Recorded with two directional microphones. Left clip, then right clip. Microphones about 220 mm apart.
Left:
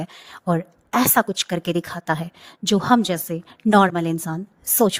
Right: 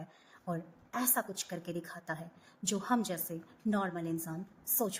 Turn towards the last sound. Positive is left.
turn(degrees=45)  # may be behind; listen again after turning